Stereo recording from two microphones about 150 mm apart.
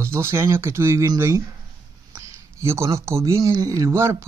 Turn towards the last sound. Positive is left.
turn(degrees=-20)  # may be behind; listen again after turning